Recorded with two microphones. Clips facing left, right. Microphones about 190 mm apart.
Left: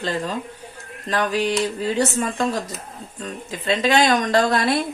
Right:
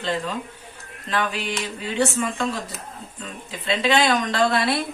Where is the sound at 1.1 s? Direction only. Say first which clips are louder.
Left 5 dB; 40° left (ahead or behind).